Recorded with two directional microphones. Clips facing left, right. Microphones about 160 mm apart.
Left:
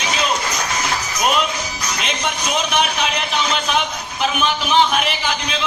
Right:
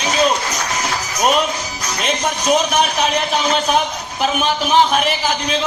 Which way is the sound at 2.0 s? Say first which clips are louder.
Right 8 dB; 40° right (ahead or behind).